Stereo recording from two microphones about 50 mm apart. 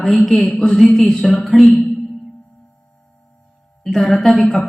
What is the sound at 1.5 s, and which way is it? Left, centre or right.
Speech, centre.